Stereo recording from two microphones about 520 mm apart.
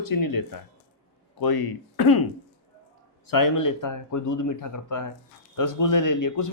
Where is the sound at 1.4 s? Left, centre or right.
Left.